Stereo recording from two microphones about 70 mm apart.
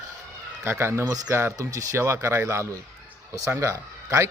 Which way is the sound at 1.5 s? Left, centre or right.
Right.